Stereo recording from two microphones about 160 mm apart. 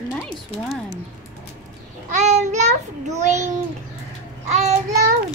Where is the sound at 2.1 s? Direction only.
45° right (ahead or behind).